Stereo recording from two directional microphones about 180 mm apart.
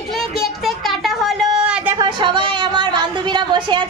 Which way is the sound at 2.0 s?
25° right (ahead or behind).